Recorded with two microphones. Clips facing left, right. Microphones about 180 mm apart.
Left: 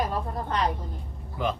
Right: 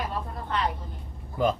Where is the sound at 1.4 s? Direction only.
40° right (ahead or behind).